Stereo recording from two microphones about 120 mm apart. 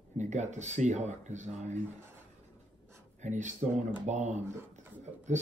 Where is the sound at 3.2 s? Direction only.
90° right.